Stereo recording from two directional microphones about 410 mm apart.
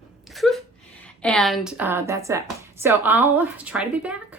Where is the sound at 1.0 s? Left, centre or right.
Centre.